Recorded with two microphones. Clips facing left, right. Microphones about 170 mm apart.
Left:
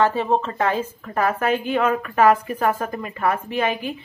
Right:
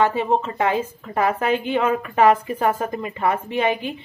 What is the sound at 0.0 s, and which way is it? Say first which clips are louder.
A woman's voice: even; 15° right (ahead or behind).